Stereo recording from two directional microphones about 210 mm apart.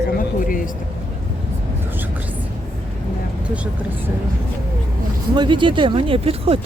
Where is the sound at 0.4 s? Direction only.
40° left (ahead or behind).